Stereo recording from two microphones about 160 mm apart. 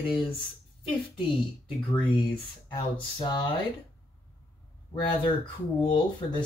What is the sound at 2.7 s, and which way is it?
Speech, 30° left (ahead or behind).